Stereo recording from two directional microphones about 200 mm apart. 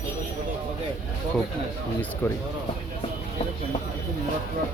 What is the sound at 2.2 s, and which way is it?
Speech, 10° left (ahead or behind).